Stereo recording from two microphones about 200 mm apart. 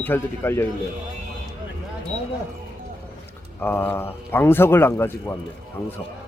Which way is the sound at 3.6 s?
10° left (ahead or behind).